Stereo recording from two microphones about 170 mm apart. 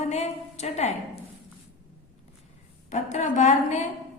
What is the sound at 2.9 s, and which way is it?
Speech, 45° left (ahead or behind).